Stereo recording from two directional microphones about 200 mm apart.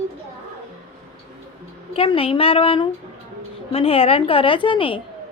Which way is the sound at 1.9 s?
30° left (ahead or behind).